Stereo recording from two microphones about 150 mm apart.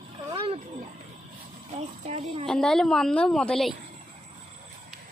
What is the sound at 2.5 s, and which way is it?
A woman's voice, 5° left (ahead or behind).